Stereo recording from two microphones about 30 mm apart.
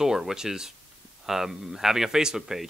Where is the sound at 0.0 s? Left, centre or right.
Centre.